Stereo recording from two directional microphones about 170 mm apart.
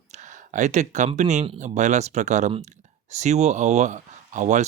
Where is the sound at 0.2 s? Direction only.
45° right (ahead or behind).